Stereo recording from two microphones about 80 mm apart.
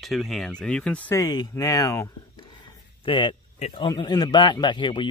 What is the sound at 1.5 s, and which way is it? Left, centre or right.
Speech, left.